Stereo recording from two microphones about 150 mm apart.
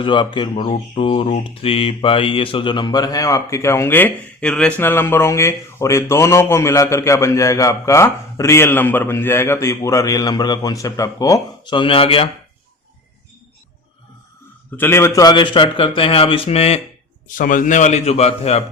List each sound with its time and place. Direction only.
0.0 s speech: 30° left (ahead or behind)
14.8 s speech: 15° left (ahead or behind); by 16.8 s 45° left (ahead or behind)
17.2 s a man's voice: 65° left (ahead or behind); by 18.6 s 45° left (ahead or behind)